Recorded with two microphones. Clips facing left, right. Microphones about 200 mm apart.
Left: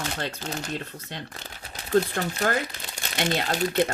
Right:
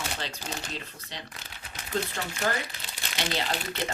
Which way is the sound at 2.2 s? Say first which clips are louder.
Left 5 dB; 55° left (ahead or behind).